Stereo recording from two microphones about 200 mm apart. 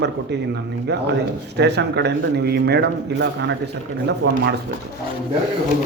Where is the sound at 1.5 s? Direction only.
55° right (ahead or behind).